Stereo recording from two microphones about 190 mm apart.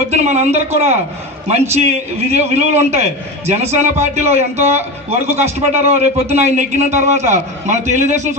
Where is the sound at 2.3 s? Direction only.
35° right (ahead or behind).